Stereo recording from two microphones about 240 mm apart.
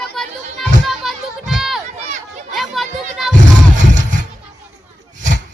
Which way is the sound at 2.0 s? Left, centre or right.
Right.